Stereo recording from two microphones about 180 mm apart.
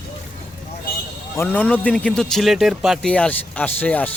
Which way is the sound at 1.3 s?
10° left (ahead or behind).